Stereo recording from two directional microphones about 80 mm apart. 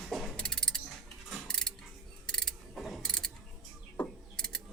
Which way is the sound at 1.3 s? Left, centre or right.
Centre.